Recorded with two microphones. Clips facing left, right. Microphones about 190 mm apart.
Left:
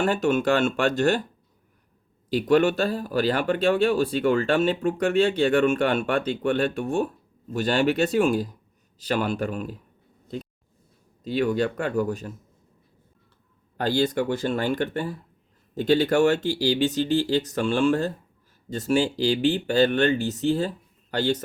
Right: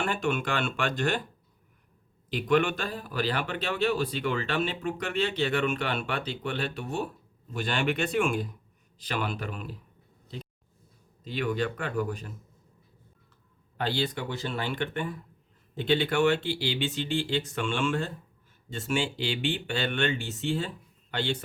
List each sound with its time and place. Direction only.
0.0 s speech: 40° left (ahead or behind)
2.3 s speech: 40° left (ahead or behind)
11.2 s speech: 40° left (ahead or behind)
13.7 s speech: 45° left (ahead or behind)